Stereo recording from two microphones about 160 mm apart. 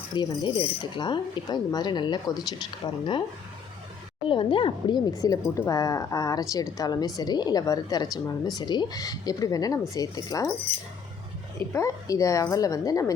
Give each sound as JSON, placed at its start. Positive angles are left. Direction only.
{"t": 0.1, "sound": "cutlery", "side_deg": 30}
{"t": 4.3, "sound": "cutlery", "side_deg": 30}
{"t": 11.7, "sound": "cutlery", "side_deg": 20}